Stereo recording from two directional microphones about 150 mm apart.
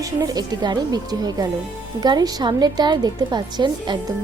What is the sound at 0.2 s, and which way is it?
A woman's voice, 25° right (ahead or behind).